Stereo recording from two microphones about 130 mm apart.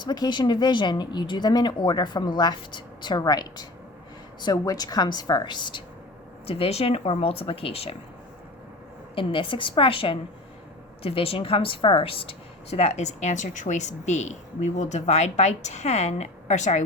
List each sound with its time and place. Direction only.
0.0 s speech: 35° left (ahead or behind)
6.5 s speech: 50° left (ahead or behind)
9.1 s a woman's voice: 40° left (ahead or behind); by 16.8 s 65° left (ahead or behind)